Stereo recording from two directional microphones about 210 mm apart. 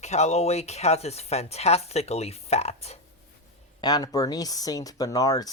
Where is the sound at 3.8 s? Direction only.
20° left (ahead or behind).